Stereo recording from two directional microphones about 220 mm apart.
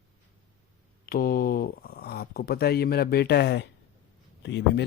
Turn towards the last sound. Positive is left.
turn(degrees=50)  # may be behind; listen again after turning